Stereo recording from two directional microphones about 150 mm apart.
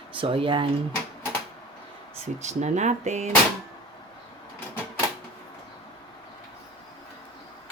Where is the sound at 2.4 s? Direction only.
50° right (ahead or behind).